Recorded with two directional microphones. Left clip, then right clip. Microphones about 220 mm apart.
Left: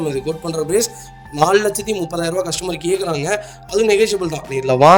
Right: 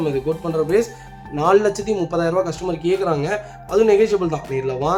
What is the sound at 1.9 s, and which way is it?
Speech, 45° left (ahead or behind).